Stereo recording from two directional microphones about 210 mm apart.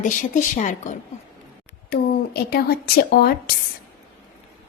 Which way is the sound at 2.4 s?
45° left (ahead or behind).